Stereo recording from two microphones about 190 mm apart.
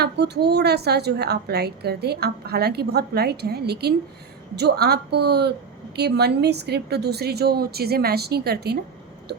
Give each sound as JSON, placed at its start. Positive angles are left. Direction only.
{"t": 0.0, "sound": "a woman's voice", "side_deg": -60}